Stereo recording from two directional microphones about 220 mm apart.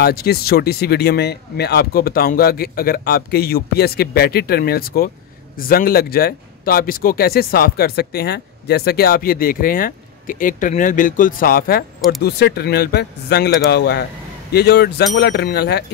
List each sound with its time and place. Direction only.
0.0 s speech: 45° left (ahead or behind)